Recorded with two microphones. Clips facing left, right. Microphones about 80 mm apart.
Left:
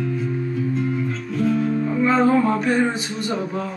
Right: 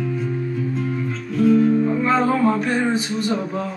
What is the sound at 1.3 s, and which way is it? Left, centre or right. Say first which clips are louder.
Music: right 6 dB; centre.